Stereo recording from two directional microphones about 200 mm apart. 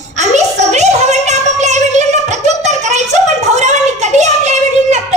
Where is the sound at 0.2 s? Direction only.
35° right (ahead or behind).